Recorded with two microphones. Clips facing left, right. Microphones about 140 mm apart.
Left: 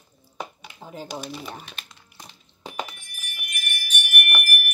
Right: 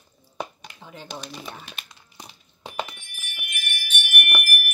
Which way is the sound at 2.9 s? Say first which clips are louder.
Even; 40° left (ahead or behind).